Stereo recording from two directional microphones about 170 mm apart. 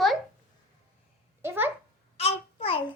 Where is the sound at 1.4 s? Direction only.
15° right (ahead or behind).